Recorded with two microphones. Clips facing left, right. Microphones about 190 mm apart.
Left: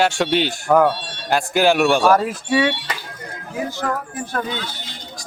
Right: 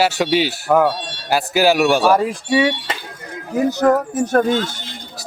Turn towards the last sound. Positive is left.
turn(degrees=-50)  # may be behind; listen again after turning